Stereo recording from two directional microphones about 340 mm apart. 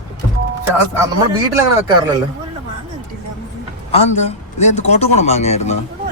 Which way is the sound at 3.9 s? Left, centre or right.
Centre.